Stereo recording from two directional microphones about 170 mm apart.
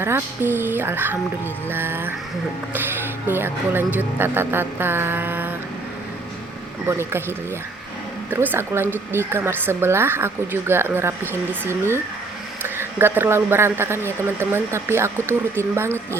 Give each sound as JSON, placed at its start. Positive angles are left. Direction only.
{"t": 0.0, "sound": "speech", "side_deg": -15}
{"t": 3.2, "sound": "speech", "side_deg": -15}
{"t": 6.8, "sound": "speech", "side_deg": -15}